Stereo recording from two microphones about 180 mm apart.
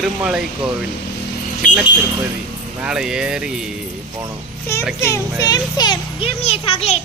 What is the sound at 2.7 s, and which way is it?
Speech, 5° right (ahead or behind).